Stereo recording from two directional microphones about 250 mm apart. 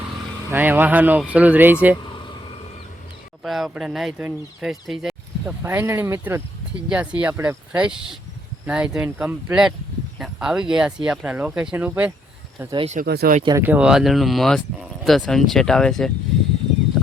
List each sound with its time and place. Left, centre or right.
0.5 s speech: centre
2.0 s vehicle: centre
3.4 s speech: centre
12.7 s speech: right
13.1 s speech: right
13.4 s speech: centre